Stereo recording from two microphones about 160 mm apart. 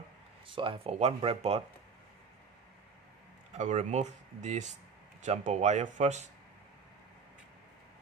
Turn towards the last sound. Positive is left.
turn(degrees=-45)  # may be behind; listen again after turning